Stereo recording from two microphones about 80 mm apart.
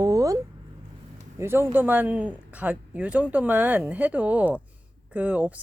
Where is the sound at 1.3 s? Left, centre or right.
Right.